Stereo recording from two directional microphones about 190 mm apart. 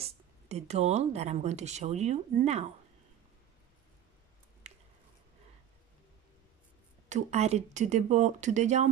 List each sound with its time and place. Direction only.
0.0 s speech: 35° right (ahead or behind)
4.6 s a sound: 35° right (ahead or behind)
7.1 s speech: 35° right (ahead or behind)